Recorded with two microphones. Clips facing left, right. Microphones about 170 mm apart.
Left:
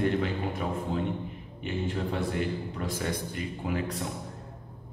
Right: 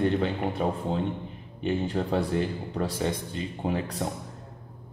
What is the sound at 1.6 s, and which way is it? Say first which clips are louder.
Speech: right 4 dB; 35° right (ahead or behind).